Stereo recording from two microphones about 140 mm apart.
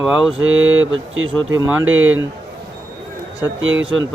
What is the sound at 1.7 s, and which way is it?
Speech, 20° right (ahead or behind).